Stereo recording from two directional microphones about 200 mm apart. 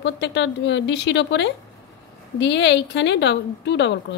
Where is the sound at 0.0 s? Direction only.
60° left (ahead or behind).